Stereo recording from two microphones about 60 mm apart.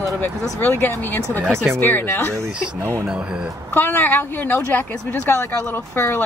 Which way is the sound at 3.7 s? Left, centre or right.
Left.